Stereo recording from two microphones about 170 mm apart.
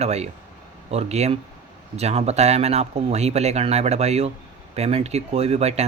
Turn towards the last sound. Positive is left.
turn(degrees=-40)  # may be behind; listen again after turning